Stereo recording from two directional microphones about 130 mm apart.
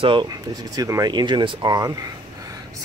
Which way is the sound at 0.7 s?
25° right (ahead or behind).